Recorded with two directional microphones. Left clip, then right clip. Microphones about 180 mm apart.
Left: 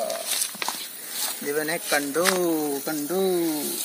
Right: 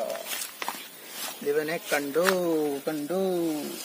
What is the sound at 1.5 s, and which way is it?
Speech, 45° right (ahead or behind).